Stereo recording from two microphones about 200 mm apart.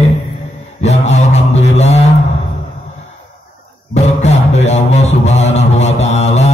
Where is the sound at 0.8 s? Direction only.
35° left (ahead or behind).